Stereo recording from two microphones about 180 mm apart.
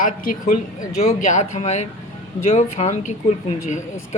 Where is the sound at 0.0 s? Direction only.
50° left (ahead or behind).